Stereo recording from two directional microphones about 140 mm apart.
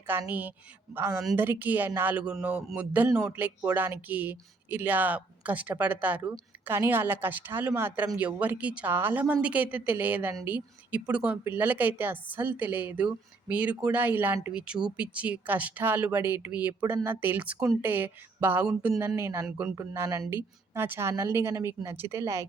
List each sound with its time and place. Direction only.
0.1 s a woman's voice: 15° right (ahead or behind)
19.5 s speech: 5° right (ahead or behind)
19.7 s a woman's voice: 20° right (ahead or behind)